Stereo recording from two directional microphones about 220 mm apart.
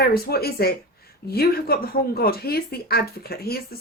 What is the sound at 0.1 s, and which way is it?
Speech, 45° left (ahead or behind).